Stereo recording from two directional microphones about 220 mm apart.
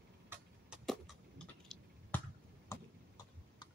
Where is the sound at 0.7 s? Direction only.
Centre (ahead or behind).